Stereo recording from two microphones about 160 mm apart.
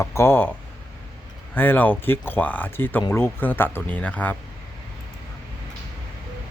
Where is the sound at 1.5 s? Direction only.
10° left (ahead or behind).